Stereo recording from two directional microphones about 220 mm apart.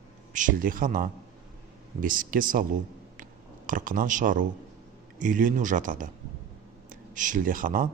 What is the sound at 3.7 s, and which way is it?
Speech, 35° right (ahead or behind).